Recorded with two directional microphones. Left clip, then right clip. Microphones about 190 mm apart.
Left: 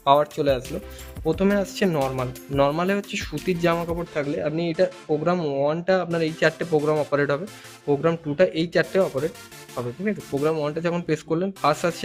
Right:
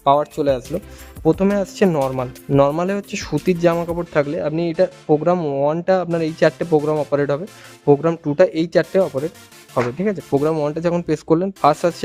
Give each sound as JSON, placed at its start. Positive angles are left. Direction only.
{"t": 0.0, "sound": "speech", "side_deg": -35}
{"t": 7.9, "sound": "speech", "side_deg": -45}